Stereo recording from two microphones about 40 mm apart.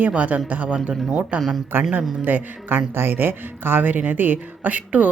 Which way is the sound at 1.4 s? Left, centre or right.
Centre.